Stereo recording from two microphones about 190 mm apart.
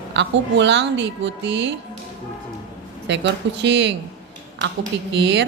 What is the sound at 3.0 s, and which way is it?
Speech, 70° right (ahead or behind).